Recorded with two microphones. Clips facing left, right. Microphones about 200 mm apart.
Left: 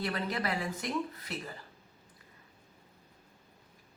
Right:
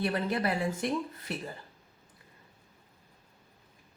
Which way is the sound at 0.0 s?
30° right (ahead or behind).